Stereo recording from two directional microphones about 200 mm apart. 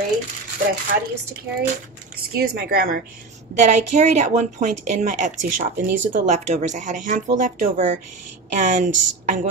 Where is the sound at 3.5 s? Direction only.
35° right (ahead or behind).